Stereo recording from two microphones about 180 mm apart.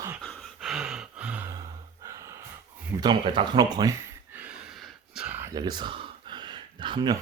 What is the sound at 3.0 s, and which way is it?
Speech, 25° right (ahead or behind).